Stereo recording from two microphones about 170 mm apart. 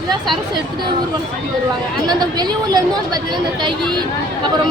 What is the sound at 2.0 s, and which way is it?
Speech, 25° right (ahead or behind).